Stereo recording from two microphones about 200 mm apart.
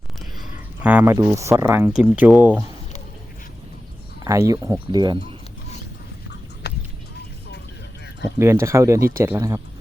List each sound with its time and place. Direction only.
0.8 s speech: 5° right (ahead or behind)
4.2 s speech: 15° right (ahead or behind)
8.4 s speech: 15° right (ahead or behind)